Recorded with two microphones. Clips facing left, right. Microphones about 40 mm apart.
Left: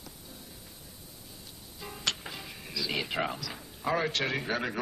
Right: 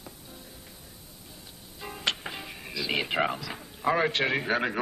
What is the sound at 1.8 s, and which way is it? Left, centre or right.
Speech, right.